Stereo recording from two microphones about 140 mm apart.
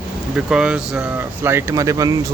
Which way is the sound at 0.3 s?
5° right (ahead or behind).